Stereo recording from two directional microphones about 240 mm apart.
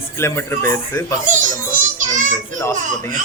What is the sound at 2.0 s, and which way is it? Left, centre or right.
Child singing, right.